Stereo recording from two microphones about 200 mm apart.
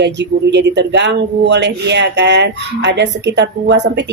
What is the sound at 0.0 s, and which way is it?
Speech, 60° right (ahead or behind).